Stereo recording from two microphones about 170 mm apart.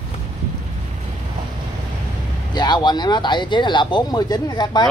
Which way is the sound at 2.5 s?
25° left (ahead or behind).